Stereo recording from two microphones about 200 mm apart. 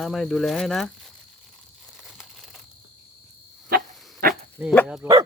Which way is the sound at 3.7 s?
45° right (ahead or behind).